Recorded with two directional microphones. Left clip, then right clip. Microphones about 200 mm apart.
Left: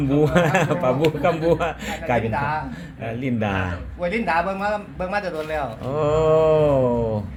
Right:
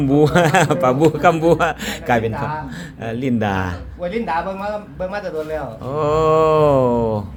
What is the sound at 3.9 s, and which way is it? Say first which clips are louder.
A man's voice: even; 30° left (ahead or behind).